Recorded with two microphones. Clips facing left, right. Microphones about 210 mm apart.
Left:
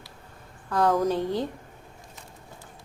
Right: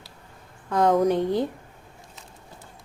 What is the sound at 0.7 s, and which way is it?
Speech, 20° right (ahead or behind).